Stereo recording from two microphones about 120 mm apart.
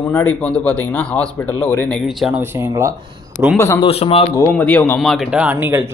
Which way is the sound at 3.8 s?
50° left (ahead or behind).